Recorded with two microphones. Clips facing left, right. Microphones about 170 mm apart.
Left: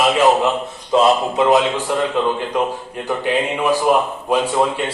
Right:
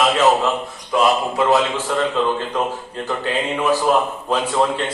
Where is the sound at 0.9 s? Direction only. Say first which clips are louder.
Left 3 dB; 25° left (ahead or behind).